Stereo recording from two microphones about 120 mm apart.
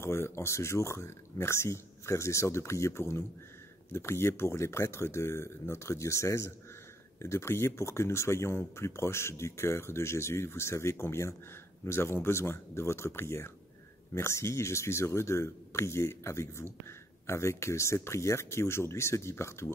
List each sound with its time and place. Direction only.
0.0 s speech: 20° left (ahead or behind)